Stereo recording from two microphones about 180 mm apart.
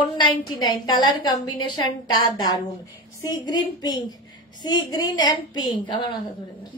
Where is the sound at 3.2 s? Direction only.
25° left (ahead or behind).